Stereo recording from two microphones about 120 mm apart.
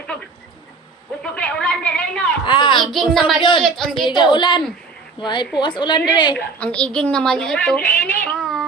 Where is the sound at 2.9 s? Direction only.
5° left (ahead or behind).